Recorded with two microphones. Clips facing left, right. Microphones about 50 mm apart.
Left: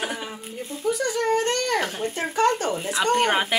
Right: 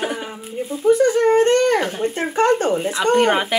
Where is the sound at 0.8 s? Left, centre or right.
Right.